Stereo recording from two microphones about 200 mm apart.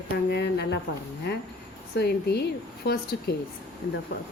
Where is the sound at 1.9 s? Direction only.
55° left (ahead or behind).